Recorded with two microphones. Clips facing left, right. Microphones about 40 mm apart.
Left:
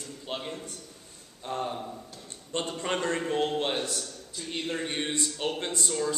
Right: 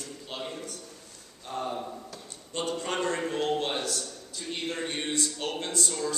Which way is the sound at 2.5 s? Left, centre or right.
Left.